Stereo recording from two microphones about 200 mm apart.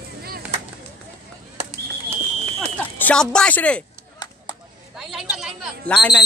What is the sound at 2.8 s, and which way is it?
Speech, 10° left (ahead or behind).